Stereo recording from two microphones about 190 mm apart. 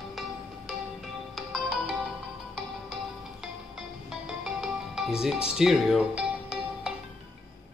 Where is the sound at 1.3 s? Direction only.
5° right (ahead or behind).